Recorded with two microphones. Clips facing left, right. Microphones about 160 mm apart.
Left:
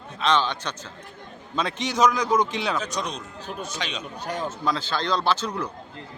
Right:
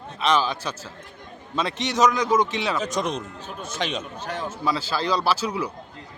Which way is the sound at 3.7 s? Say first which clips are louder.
Right 4 dB; 50° right (ahead or behind).